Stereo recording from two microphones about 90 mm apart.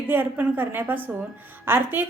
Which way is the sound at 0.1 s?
20° right (ahead or behind).